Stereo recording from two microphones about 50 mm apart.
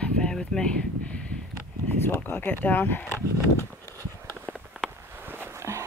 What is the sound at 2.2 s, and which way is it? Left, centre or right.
Speech, left.